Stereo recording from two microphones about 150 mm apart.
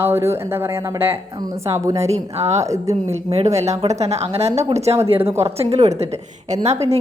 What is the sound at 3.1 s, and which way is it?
A woman's voice, 45° right (ahead or behind).